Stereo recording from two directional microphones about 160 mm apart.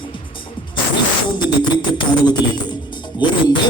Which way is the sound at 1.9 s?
25° left (ahead or behind).